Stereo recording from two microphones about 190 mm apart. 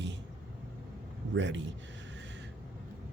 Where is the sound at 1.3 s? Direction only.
70° right (ahead or behind).